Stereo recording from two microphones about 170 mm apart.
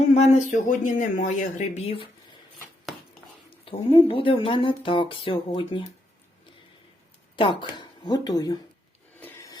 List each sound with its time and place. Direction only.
0.0 s speech: 40° left (ahead or behind)
3.7 s speech: 30° left (ahead or behind)
7.3 s speech: 30° left (ahead or behind)
9.2 s filing: 20° left (ahead or behind)